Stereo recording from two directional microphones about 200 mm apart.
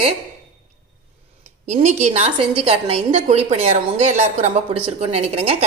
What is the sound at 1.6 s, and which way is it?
A woman's voice, 35° right (ahead or behind).